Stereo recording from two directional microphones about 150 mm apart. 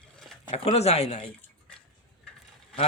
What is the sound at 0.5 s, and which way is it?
Speech, 45° left (ahead or behind).